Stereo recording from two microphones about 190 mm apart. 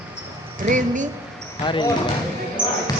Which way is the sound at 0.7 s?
40° right (ahead or behind).